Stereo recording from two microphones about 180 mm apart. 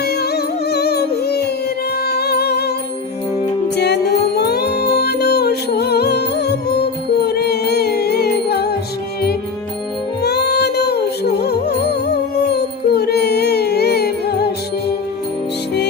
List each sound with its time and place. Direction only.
0.0 s music: 60° left (ahead or behind)
4.4 s music: 65° left (ahead or behind)
10.2 s music: 65° left (ahead or behind)